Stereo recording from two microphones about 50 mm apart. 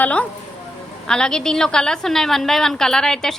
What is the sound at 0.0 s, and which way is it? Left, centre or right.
Speech, left.